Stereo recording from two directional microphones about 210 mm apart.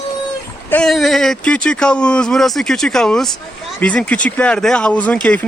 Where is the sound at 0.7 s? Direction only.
Centre (ahead or behind).